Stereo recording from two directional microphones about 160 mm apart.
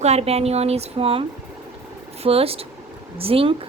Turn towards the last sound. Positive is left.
turn(degrees=-35)  # may be behind; listen again after turning